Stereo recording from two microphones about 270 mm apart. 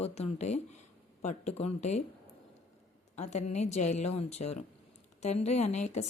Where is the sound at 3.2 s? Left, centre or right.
Left.